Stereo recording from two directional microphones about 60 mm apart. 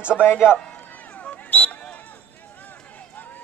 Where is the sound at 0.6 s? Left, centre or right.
Centre.